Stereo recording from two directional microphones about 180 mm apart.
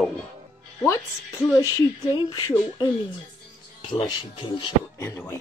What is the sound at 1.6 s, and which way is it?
Speech, 20° left (ahead or behind).